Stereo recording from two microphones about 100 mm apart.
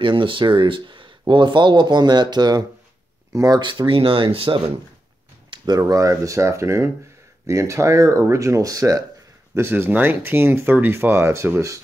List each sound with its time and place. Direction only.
0.0 s speech: 55° right (ahead or behind); by 3.6 s 40° right (ahead or behind)
3.6 s speech: 55° right (ahead or behind)
5.8 s speech: 35° right (ahead or behind)
9.6 s speech: 20° right (ahead or behind)